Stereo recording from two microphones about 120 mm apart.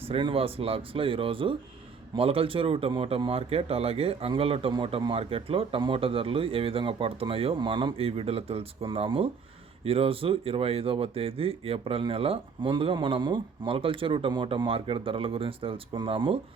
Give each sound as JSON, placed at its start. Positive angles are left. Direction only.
{"t": 0.0, "sound": "speech", "side_deg": -50}